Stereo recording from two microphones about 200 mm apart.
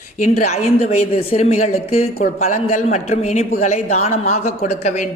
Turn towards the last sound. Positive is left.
turn(degrees=35)  # may be behind; listen again after turning